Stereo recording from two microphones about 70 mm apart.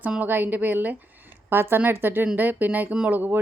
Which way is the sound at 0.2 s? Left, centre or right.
Right.